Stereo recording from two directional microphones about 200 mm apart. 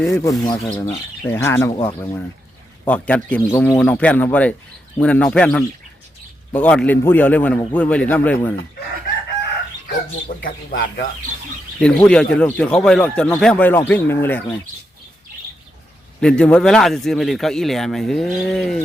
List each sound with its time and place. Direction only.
0.1 s speech: 15° left (ahead or behind)
2.8 s speech: 5° left (ahead or behind)
10.4 s speech: 45° left (ahead or behind)
11.8 s a man's voice: 5° left (ahead or behind)
16.2 s a man's voice: 5° left (ahead or behind)